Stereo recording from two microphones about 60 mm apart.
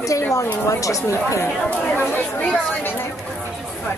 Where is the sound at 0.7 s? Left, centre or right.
Left.